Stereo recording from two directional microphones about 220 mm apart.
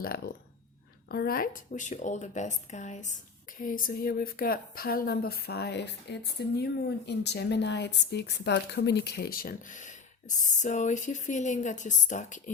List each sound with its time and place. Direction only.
0.0 s a woman's voice: 45° left (ahead or behind)